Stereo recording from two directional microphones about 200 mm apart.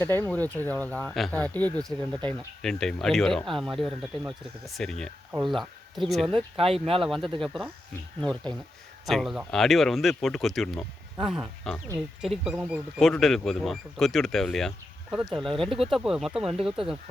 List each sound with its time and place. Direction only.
0.0 s speech: 10° left (ahead or behind)
6.6 s speech: 30° right (ahead or behind)
7.4 s speech: centre (ahead or behind)
9.0 s speech: centre (ahead or behind)